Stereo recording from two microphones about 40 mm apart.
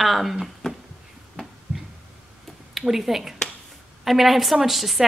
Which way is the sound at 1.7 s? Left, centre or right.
Right.